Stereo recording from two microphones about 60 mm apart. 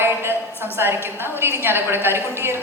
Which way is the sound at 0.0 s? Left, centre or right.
Right.